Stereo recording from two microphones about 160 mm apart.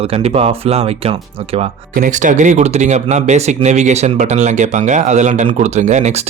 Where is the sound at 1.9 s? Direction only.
55° right (ahead or behind).